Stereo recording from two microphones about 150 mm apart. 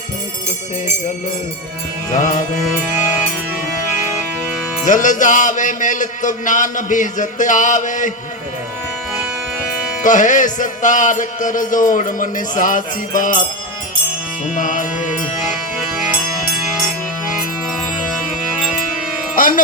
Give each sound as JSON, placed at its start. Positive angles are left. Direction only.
{"t": 2.1, "sound": "music", "side_deg": 55}
{"t": 4.9, "sound": "music", "side_deg": 55}
{"t": 10.0, "sound": "music", "side_deg": 55}
{"t": 14.5, "sound": "music", "side_deg": 60}
{"t": 19.4, "sound": "music", "side_deg": 65}